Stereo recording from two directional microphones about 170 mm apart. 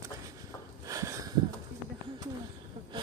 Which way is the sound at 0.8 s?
20° right (ahead or behind).